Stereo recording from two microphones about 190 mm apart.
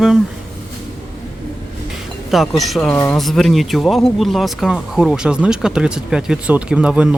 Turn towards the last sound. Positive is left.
turn(degrees=-5)  # may be behind; listen again after turning